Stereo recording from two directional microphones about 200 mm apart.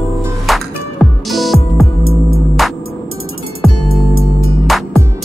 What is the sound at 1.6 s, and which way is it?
Music, 90° right.